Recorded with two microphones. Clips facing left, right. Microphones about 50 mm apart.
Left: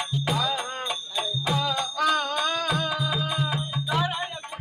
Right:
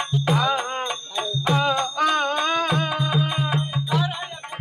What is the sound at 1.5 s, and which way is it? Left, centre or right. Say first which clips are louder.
Music: right 6 dB; right.